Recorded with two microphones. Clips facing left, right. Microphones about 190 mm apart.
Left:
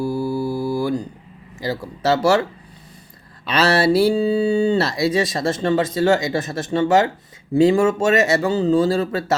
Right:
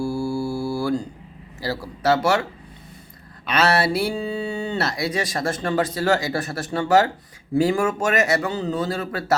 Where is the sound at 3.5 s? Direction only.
30° left (ahead or behind).